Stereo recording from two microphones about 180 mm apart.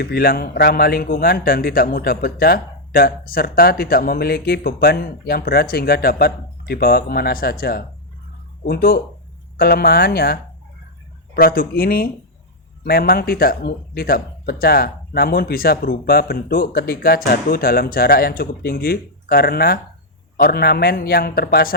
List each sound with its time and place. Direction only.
0.0 s a man's voice: 60° left (ahead or behind)
11.3 s a man's voice: 55° left (ahead or behind)